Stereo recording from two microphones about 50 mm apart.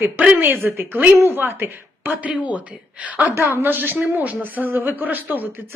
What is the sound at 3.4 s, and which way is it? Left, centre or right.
Speech, right.